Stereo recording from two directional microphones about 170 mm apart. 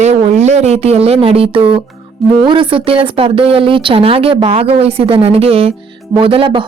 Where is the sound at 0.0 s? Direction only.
40° right (ahead or behind).